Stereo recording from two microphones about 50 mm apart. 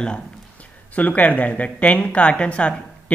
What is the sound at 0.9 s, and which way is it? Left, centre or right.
Speech, left.